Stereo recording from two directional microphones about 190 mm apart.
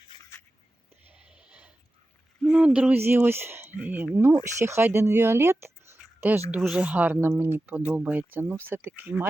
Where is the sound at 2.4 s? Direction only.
5° right (ahead or behind).